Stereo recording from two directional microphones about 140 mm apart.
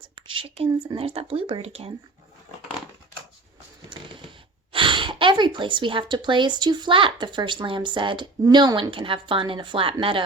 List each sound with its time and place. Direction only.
0.2 s speech: 40° right (ahead or behind)
3.8 s a woman's voice: 35° right (ahead or behind)